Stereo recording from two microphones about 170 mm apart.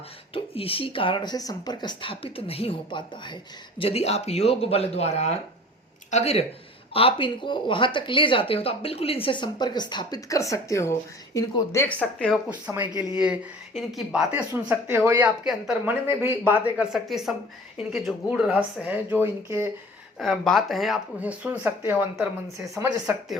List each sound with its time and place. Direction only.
0.3 s speech: 35° left (ahead or behind); by 12.4 s 5° left (ahead or behind)
12.5 s speech: 10° right (ahead or behind)
20.1 s speech: centre (ahead or behind)